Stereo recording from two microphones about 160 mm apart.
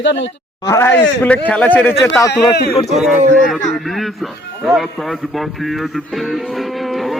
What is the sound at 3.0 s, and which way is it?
A man's voice, centre (ahead or behind).